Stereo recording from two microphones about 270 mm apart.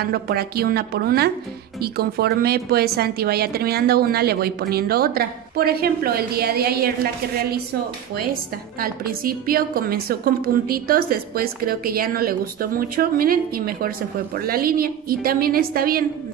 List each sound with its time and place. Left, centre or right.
0.0 s a woman's voice: right
8.7 s a woman's voice: right